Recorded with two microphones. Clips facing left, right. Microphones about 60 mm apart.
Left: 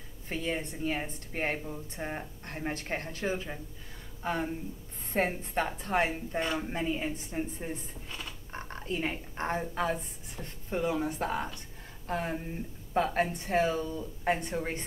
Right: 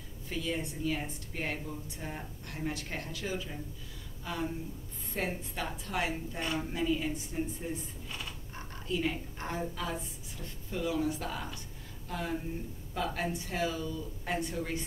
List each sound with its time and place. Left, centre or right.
0.3 s a woman's voice: left